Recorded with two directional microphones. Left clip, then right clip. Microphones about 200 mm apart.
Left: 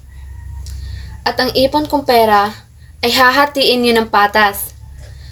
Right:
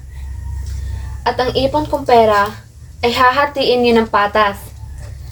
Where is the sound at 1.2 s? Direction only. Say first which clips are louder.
Left 2 dB; 45° left (ahead or behind).